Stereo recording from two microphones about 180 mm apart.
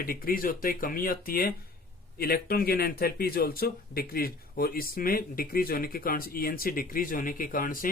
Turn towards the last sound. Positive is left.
turn(degrees=50)  # may be behind; listen again after turning